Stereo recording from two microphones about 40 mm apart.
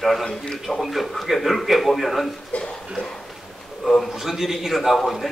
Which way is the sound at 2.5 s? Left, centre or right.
Left.